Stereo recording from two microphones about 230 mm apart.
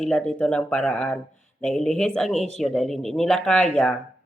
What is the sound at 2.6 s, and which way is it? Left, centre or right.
Speech, centre.